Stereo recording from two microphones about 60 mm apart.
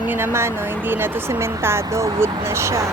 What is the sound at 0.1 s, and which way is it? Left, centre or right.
Speech, right.